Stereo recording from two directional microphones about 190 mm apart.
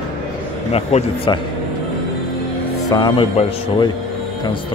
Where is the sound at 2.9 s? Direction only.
25° left (ahead or behind).